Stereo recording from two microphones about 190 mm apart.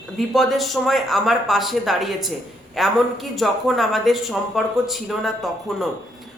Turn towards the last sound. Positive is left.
turn(degrees=0)  # may be behind; listen again after turning